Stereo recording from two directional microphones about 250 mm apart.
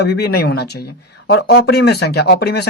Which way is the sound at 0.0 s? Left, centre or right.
Left.